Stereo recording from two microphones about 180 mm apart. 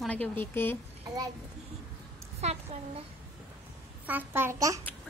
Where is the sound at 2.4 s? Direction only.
35° right (ahead or behind).